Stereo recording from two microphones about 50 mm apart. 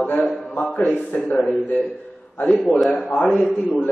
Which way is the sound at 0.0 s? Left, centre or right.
Left.